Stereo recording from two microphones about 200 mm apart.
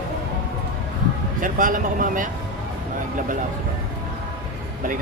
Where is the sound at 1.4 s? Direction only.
45° right (ahead or behind).